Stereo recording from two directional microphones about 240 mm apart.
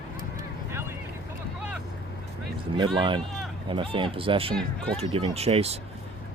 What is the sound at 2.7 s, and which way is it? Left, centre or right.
Speech, centre.